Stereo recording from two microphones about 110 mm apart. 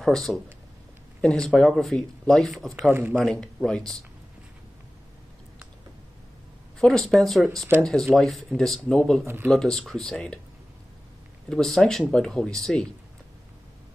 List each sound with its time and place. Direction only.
0.0 s speech: centre (ahead or behind)
2.9 s speech: 15° right (ahead or behind)
3.3 s speech: 5° left (ahead or behind)
6.8 s speech: centre (ahead or behind)
9.2 s speech: 20° right (ahead or behind)
9.5 s speech: 5° left (ahead or behind)
11.4 s speech: 5° left (ahead or behind)